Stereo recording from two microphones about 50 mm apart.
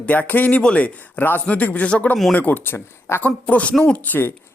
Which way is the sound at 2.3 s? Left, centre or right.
Left.